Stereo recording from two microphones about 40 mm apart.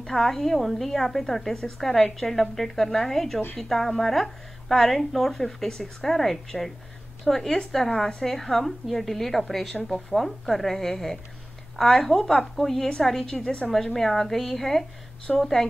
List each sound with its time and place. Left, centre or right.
0.0 s a woman's voice: centre
13.4 s a woman's voice: left
13.9 s a woman's voice: centre